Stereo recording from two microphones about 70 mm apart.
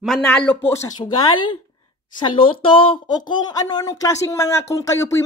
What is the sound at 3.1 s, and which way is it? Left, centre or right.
Speech, left.